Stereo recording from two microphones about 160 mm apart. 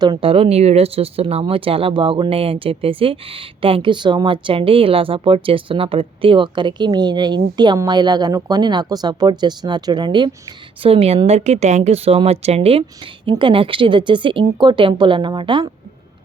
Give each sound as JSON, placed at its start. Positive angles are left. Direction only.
{"t": 0.0, "sound": "speech", "side_deg": -30}